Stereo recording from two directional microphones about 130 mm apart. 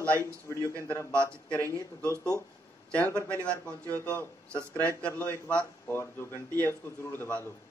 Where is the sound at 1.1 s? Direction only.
20° right (ahead or behind).